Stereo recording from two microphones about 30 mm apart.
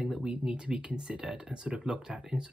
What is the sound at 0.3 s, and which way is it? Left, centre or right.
Speech, right.